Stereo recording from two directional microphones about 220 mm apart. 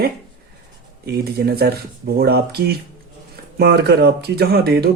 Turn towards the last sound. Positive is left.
turn(degrees=-45)  # may be behind; listen again after turning